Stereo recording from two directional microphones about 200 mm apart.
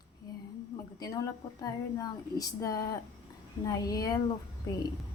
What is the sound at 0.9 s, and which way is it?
Speech, 20° left (ahead or behind).